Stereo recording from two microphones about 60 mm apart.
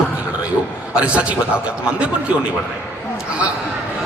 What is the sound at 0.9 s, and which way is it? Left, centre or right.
A man's voice, centre.